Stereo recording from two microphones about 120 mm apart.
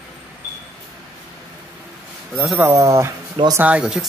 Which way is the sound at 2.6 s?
25° right (ahead or behind).